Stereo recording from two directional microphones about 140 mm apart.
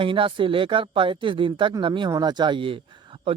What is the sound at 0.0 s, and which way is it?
Speech, 35° right (ahead or behind).